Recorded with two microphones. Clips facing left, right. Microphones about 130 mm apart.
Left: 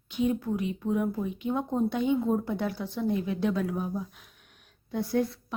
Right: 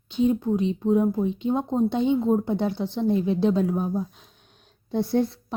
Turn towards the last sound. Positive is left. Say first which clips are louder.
# right 5 dB
turn(degrees=-30)  # may be behind; listen again after turning